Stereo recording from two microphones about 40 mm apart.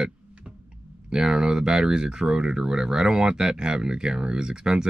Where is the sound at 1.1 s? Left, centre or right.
Centre.